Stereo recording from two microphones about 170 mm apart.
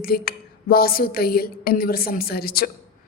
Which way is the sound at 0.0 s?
60° left (ahead or behind).